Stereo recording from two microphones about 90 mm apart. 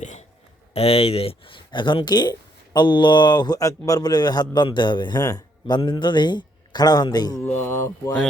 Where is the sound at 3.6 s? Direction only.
40° left (ahead or behind).